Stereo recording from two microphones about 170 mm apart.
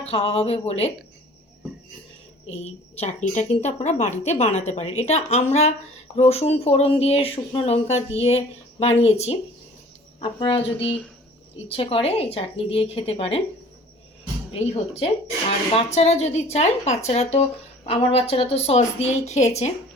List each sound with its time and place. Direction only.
0.0 s a woman's voice: 35° left (ahead or behind)
2.5 s a woman's voice: 40° left (ahead or behind)
14.6 s a woman's voice: 35° left (ahead or behind)